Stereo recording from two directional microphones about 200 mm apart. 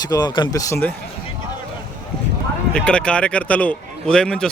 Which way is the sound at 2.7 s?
5° left (ahead or behind).